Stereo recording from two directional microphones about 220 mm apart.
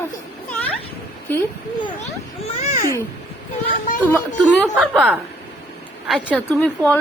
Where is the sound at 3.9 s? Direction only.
35° left (ahead or behind).